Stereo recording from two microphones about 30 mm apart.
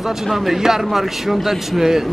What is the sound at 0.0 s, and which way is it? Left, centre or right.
A man's voice, centre.